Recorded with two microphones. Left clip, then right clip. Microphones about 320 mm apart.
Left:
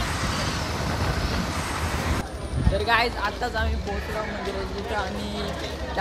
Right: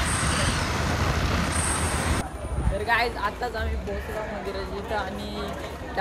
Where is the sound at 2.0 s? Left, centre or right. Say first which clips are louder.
Right 1 dB; centre.